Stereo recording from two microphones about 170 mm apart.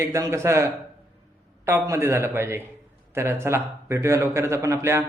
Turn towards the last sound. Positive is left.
turn(degrees=-20)  # may be behind; listen again after turning